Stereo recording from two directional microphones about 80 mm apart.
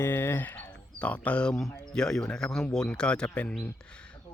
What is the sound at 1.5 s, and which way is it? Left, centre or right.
Speech, centre.